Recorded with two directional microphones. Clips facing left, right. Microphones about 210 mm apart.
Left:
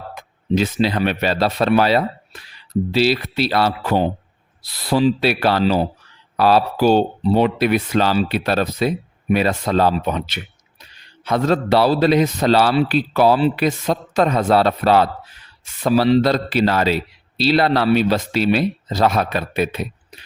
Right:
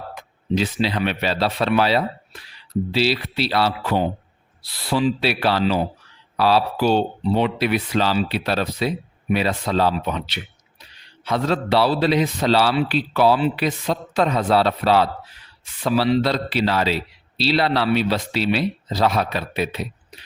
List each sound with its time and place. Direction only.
0.1 s a man's voice: 45° left (ahead or behind)
6.3 s a man's voice: 50° left (ahead or behind)